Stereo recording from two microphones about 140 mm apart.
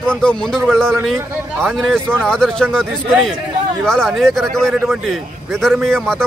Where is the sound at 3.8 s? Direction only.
5° left (ahead or behind).